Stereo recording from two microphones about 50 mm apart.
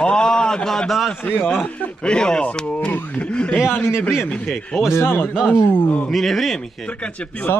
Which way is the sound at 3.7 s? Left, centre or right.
Left.